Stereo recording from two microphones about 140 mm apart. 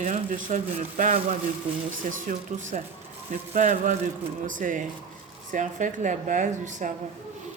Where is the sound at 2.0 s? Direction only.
70° right (ahead or behind).